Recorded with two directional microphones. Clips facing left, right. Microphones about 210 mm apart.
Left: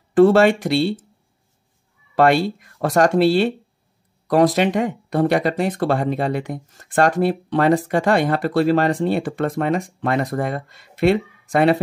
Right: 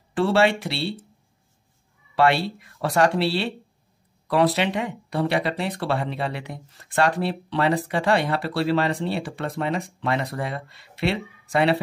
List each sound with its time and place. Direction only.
0.1 s speech: 50° left (ahead or behind)
2.1 s speech: 45° left (ahead or behind)